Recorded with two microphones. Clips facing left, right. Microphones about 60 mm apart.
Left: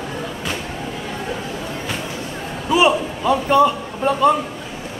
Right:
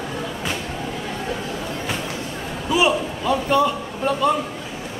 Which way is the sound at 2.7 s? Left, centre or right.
Left.